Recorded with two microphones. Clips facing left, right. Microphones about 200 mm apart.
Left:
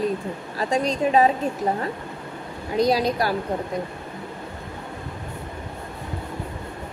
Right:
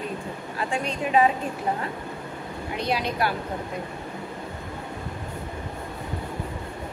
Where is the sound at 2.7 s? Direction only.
35° left (ahead or behind).